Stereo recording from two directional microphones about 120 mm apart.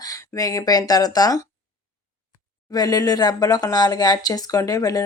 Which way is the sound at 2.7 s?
30° left (ahead or behind).